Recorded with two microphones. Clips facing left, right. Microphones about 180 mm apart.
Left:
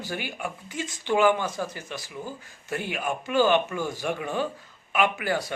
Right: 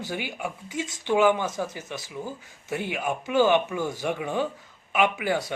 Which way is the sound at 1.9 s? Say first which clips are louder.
Right 1 dB; 25° right (ahead or behind).